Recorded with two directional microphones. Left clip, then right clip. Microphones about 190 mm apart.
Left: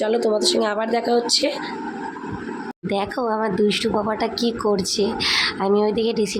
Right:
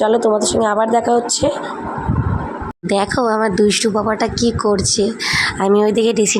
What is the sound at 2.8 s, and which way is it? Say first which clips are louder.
Speech: right 7 dB; 25° right (ahead or behind).